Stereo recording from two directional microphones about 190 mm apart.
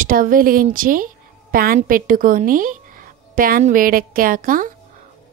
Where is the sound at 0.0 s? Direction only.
45° right (ahead or behind).